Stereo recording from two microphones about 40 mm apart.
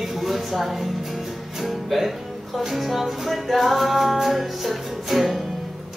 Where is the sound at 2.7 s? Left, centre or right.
Centre.